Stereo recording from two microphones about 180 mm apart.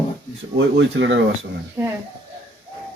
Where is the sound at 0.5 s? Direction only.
85° right.